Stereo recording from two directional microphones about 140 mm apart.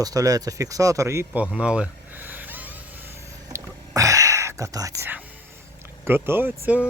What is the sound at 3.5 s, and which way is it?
Whispering, 20° right (ahead or behind).